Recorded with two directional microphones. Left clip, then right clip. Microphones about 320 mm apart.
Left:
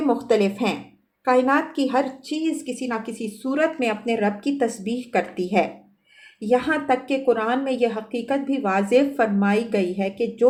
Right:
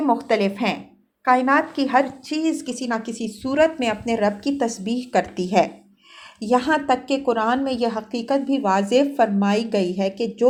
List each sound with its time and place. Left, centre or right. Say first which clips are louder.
0.0 s a woman's voice: even; centre